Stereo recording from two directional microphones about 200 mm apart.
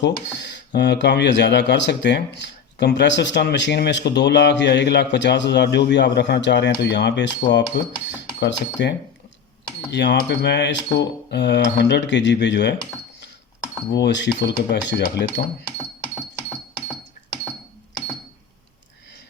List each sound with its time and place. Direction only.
0.3 s speech: 60° left (ahead or behind)
13.9 s speech: 60° left (ahead or behind)
16.1 s music: 5° left (ahead or behind)